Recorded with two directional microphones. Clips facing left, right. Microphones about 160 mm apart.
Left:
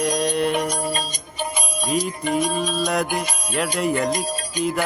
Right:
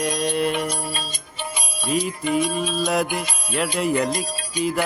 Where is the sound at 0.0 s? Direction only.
Centre (ahead or behind).